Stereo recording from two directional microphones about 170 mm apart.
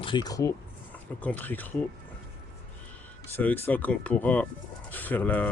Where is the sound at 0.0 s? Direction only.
25° left (ahead or behind).